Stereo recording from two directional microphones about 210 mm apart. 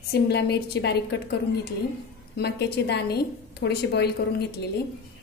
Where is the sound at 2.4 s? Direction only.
50° left (ahead or behind).